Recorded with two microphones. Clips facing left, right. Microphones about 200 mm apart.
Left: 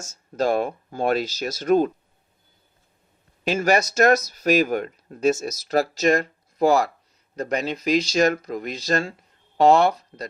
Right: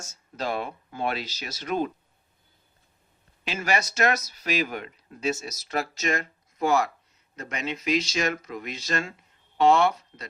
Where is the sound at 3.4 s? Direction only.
45° left (ahead or behind).